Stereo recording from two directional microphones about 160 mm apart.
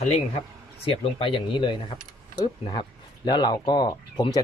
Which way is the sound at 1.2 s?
30° left (ahead or behind).